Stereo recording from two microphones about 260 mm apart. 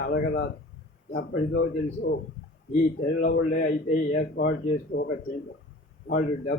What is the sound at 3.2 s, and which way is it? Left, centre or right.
Speech, left.